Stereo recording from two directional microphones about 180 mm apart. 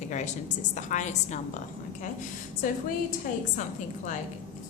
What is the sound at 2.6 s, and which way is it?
Speech, 45° left (ahead or behind).